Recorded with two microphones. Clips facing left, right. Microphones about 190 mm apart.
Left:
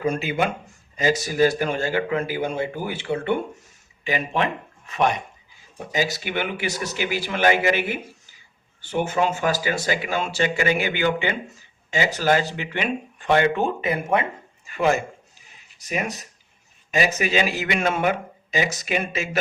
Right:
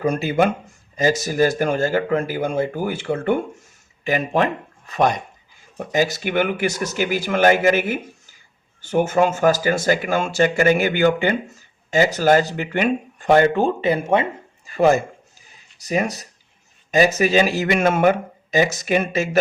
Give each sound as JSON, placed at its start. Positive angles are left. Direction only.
{"t": 0.0, "sound": "a man's voice", "side_deg": -40}
{"t": 4.0, "sound": "a sound", "side_deg": -45}
{"t": 5.7, "sound": "a man's voice", "side_deg": -50}